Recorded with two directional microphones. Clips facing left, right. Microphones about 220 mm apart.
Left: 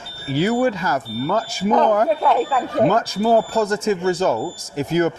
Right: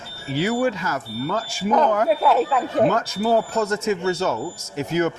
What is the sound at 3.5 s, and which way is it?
Speech, 35° left (ahead or behind).